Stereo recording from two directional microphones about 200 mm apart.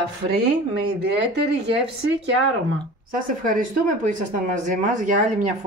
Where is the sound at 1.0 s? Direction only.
55° right (ahead or behind).